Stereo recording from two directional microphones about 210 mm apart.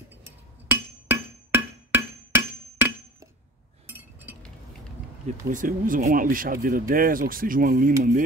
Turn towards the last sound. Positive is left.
turn(degrees=-40)  # may be behind; listen again after turning